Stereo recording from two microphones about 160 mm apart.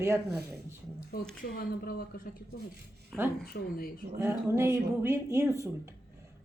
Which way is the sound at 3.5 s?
65° left (ahead or behind).